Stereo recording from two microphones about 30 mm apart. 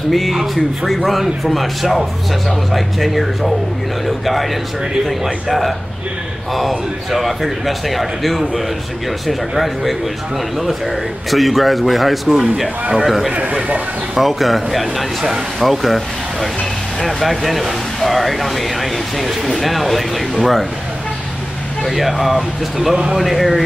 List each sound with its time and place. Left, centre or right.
0.1 s speech: centre
5.2 s speech: centre
7.1 s speech: centre
11.2 s a man's voice: centre
13.3 s a man's voice: right
13.6 s speech: right
14.1 s speech: centre
21.8 s speech: centre